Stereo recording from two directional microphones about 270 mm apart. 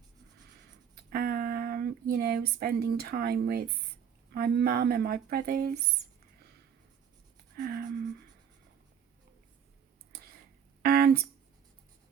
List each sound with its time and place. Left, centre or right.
1.1 s a sound: right
4.3 s speech: right
7.5 s speech: right
10.8 s speech: right